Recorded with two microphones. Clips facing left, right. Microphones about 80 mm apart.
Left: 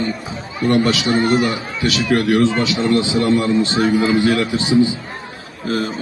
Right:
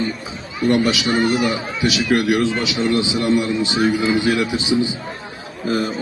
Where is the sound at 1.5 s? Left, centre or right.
Centre.